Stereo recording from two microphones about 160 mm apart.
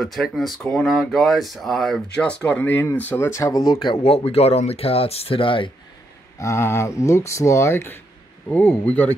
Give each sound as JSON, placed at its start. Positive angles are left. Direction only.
{"t": 0.0, "sound": "speech", "side_deg": 0}
{"t": 4.0, "sound": "speech", "side_deg": 40}
{"t": 6.3, "sound": "speech", "side_deg": 15}